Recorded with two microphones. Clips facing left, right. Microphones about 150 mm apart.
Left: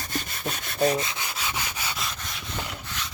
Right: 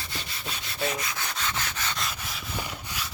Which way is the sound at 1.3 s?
10° left (ahead or behind).